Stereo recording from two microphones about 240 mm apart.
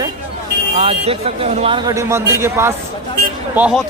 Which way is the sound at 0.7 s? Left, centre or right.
Right.